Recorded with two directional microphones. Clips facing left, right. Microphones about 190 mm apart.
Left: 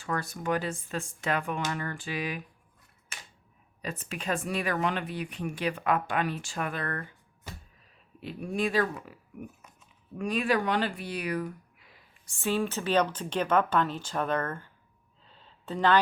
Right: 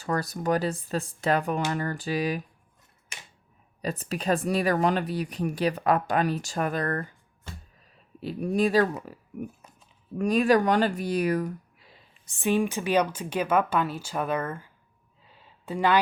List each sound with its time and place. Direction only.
0.0 s speech: 40° right (ahead or behind)
3.8 s speech: 35° right (ahead or behind)
8.2 s speech: 40° right (ahead or behind); by 14.7 s 10° right (ahead or behind)
15.2 s a sound: 10° right (ahead or behind)